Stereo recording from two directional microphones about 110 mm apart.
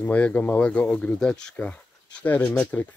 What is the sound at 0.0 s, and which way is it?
Speech, 15° left (ahead or behind).